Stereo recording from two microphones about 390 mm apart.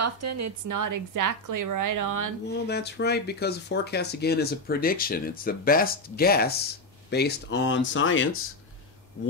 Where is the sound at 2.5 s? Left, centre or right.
Left.